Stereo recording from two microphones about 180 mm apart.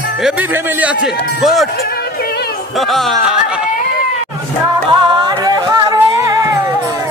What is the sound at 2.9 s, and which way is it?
Speech, centre (ahead or behind).